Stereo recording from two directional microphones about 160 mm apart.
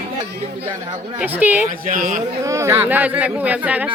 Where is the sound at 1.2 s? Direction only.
10° right (ahead or behind).